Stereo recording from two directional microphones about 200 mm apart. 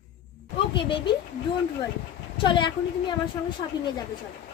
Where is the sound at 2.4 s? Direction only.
25° left (ahead or behind).